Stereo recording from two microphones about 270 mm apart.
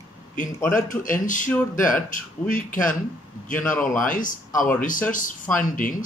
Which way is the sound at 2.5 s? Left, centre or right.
Left.